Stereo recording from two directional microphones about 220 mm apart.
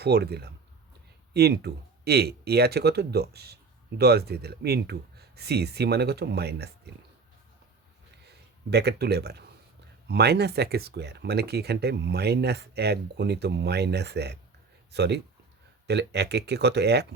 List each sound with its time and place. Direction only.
0.0 s speech: 45° right (ahead or behind)
8.3 s speech: 50° right (ahead or behind)